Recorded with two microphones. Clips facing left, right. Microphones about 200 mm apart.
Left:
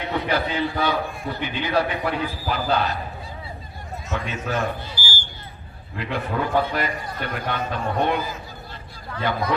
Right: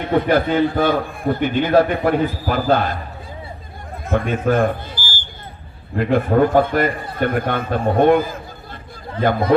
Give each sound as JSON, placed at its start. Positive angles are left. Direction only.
{"t": 0.0, "sound": "a man's voice", "side_deg": -50}
{"t": 4.0, "sound": "a man's voice", "side_deg": -55}